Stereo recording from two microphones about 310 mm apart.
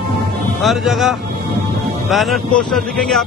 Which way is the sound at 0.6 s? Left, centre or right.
Centre.